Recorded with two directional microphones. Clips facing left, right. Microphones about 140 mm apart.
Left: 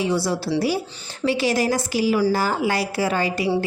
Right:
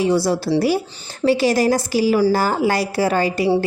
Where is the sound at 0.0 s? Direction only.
45° right (ahead or behind).